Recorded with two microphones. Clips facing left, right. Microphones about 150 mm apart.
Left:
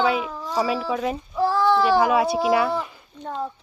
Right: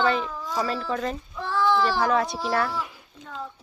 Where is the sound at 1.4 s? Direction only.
40° left (ahead or behind).